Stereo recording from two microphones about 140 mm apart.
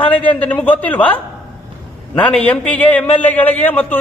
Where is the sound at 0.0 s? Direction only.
10° left (ahead or behind).